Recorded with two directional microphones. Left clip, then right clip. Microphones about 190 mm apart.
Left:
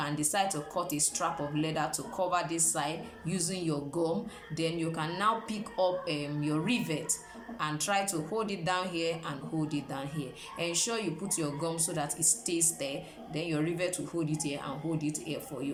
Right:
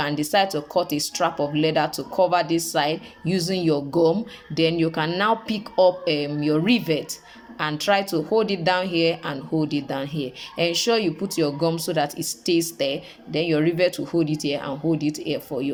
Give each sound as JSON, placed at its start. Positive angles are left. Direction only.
{"t": 0.0, "sound": "speech", "side_deg": -35}